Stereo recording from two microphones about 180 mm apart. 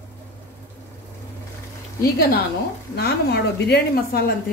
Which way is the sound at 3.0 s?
65° left (ahead or behind).